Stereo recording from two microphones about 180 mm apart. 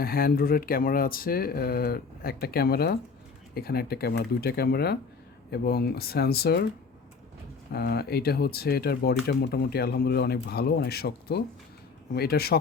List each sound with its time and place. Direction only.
0.0 s speech: 55° left (ahead or behind)
7.7 s speech: 65° left (ahead or behind)